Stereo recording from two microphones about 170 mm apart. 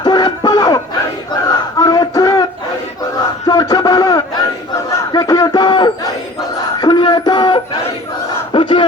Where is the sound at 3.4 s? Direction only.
20° left (ahead or behind).